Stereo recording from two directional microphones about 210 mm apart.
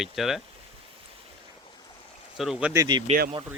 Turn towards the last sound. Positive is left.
turn(degrees=-20)  # may be behind; listen again after turning